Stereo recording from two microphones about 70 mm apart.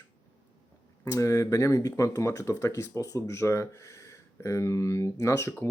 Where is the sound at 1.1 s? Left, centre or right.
Left.